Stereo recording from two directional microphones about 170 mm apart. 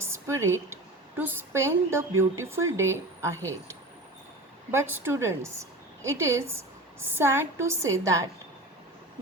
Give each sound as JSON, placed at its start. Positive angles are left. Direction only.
{"t": 0.0, "sound": "a woman's voice", "side_deg": -15}